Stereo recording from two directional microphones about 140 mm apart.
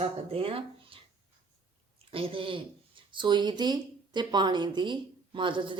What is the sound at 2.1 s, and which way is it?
Speech, 40° right (ahead or behind).